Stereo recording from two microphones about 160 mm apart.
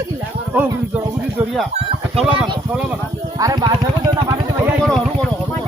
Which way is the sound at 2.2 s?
35° right (ahead or behind).